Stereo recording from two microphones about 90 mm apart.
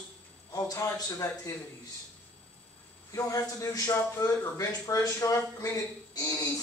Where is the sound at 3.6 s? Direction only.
35° left (ahead or behind).